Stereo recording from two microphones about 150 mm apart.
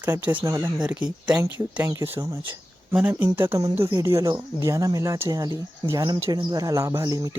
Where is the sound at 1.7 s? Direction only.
15° right (ahead or behind).